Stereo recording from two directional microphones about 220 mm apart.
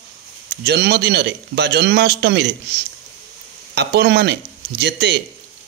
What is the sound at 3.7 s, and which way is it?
A man's voice, 50° right (ahead or behind).